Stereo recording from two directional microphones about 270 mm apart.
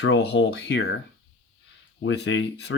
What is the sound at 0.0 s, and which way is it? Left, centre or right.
Speech, left.